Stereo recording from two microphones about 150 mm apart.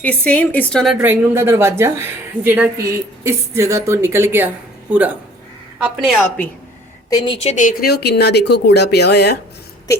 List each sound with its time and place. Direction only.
0.0 s a woman's voice: 10° left (ahead or behind)
1.0 s a woman's voice: 15° right (ahead or behind)
7.1 s a woman's voice: 25° left (ahead or behind)
7.4 s speech: 55° left (ahead or behind); by 9.4 s 90° left